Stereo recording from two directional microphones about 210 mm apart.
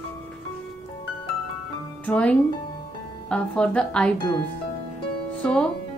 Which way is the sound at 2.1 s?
5° left (ahead or behind).